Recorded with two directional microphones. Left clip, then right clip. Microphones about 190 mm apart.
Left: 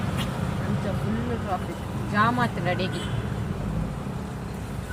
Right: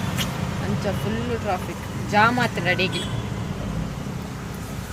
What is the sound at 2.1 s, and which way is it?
Speech, 20° right (ahead or behind).